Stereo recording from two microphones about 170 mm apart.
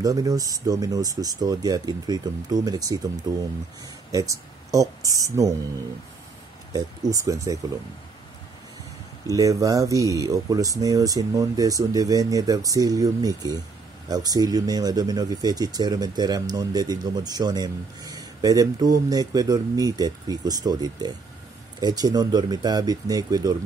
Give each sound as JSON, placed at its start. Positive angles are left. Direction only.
{"t": 0.0, "sound": "speech", "side_deg": -20}
{"t": 6.7, "sound": "speech", "side_deg": -20}
{"t": 9.3, "sound": "speech", "side_deg": -20}